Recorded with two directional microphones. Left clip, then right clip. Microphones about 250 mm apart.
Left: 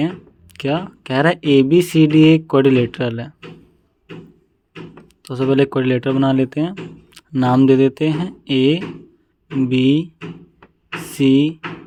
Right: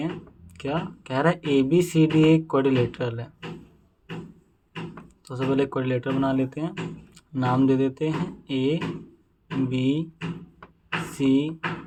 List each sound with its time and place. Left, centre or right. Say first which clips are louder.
0.5 s speech: left 8 dB; left
5.0 s speech: left 9 dB; left
11.1 s speech: left 9 dB; left